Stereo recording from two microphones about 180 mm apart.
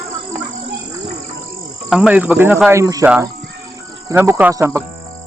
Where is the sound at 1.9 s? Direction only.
5° right (ahead or behind).